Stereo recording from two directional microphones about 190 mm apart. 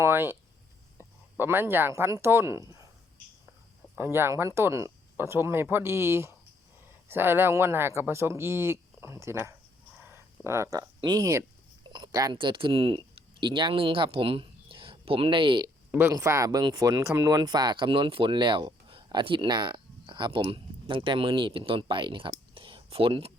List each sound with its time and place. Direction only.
0.0 s a sound: 10° right (ahead or behind)
1.4 s speech: 10° right (ahead or behind)
3.9 s speech: 10° right (ahead or behind)
15.9 s speech: 15° right (ahead or behind); by 23.3 s 30° right (ahead or behind)